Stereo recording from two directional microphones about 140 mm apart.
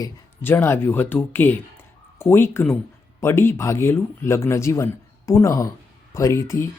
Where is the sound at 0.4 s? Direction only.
15° left (ahead or behind).